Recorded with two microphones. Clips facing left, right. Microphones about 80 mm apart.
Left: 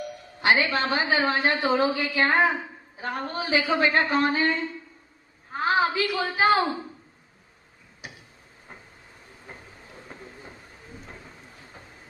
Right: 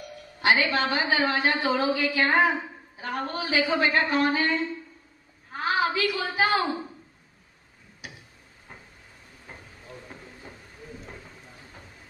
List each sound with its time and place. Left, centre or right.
0.4 s a woman's voice: left
5.5 s a woman's voice: left